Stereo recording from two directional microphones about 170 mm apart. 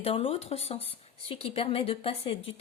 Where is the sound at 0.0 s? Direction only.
35° left (ahead or behind).